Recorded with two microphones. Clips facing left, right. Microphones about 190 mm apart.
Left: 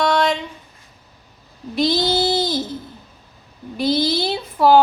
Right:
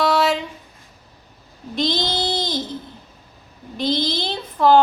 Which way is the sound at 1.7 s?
5° left (ahead or behind).